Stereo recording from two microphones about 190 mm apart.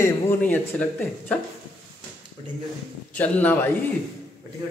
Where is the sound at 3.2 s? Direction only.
10° left (ahead or behind).